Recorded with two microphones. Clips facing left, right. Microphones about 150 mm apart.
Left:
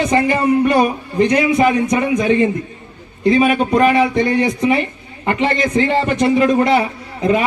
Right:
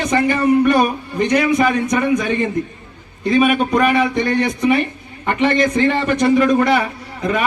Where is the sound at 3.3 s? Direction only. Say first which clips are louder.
Even; 30° left (ahead or behind).